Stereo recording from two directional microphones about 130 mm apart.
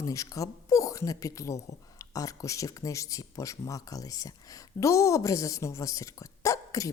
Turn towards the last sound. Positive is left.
turn(degrees=25)  # may be behind; listen again after turning